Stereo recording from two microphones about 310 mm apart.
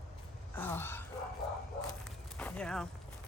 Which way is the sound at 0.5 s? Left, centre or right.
Centre.